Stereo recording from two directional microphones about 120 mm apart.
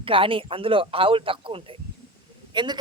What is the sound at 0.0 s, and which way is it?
A man's voice, 50° right (ahead or behind).